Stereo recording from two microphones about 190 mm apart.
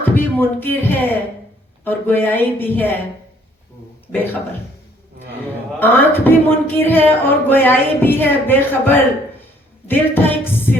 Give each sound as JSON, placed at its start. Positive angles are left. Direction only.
{"t": 0.0, "sound": "speech", "side_deg": 10}
{"t": 4.1, "sound": "speech", "side_deg": 10}
{"t": 5.8, "sound": "speech", "side_deg": 10}